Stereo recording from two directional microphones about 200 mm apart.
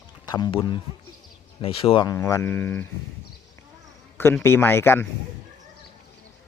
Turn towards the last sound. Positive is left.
turn(degrees=10)  # may be behind; listen again after turning